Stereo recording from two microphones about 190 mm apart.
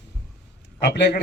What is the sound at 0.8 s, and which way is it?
Speech, 60° left (ahead or behind).